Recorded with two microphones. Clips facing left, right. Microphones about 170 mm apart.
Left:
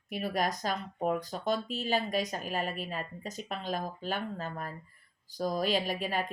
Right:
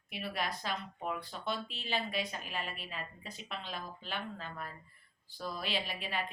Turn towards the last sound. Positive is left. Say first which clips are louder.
# left 7 dB
turn(degrees=45)  # may be behind; listen again after turning